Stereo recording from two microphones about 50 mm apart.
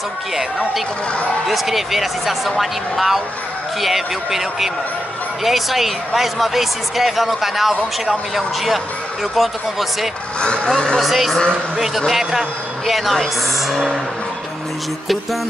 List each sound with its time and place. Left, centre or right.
1.5 s speech: centre
10.4 s speech: centre
11.0 s speech: centre
11.3 s speech: centre
12.1 s speech: centre